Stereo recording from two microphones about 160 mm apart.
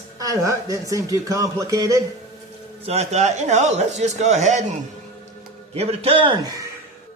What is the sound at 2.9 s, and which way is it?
A man's voice, 45° right (ahead or behind).